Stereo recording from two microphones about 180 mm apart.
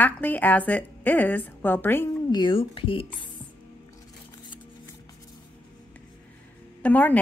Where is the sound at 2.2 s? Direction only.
25° left (ahead or behind).